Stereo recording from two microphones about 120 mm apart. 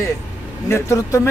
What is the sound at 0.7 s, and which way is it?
Speech, 25° left (ahead or behind).